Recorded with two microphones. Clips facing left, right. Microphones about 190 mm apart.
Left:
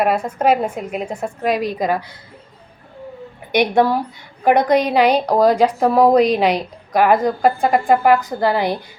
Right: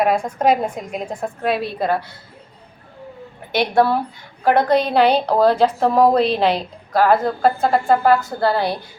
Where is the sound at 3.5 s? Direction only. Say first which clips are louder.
Left 1 dB; 15° left (ahead or behind).